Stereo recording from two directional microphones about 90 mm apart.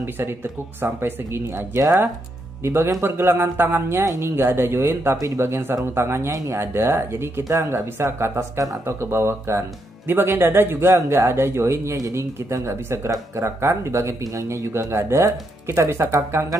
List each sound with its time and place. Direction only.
0.0 s speech: 25° right (ahead or behind)
7.4 s speech: 40° right (ahead or behind)